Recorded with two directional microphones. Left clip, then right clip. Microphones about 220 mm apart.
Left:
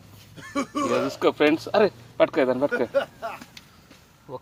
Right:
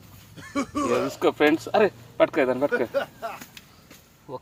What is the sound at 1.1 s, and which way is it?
Speech, 25° left (ahead or behind).